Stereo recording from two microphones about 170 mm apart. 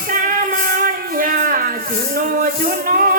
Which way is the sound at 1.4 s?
55° right (ahead or behind).